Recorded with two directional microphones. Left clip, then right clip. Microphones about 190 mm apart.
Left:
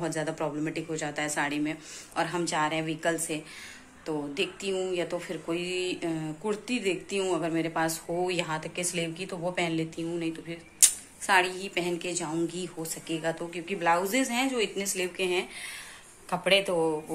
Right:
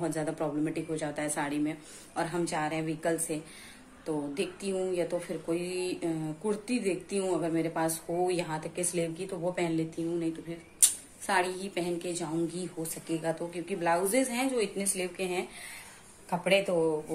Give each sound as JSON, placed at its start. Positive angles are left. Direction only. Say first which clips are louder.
{"t": 0.0, "sound": "speech", "louder": "left 1 dB", "side_deg": -5}